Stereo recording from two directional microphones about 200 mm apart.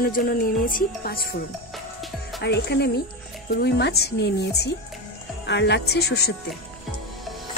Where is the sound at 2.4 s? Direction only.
55° left (ahead or behind).